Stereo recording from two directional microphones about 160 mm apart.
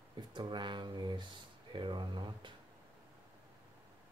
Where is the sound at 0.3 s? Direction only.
30° right (ahead or behind).